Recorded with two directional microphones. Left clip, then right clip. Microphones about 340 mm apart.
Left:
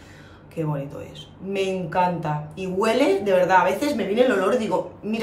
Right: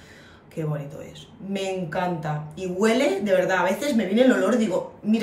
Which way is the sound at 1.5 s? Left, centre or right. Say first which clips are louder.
Left 3 dB; centre.